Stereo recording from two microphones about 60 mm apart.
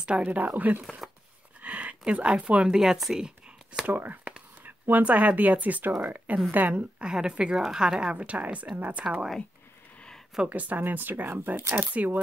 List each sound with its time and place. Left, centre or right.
0.0 s speech: centre
2.8 s speech: centre
3.8 s whispering: right
4.8 s a woman's voice: right
7.0 s a woman's voice: centre
10.5 s speech: right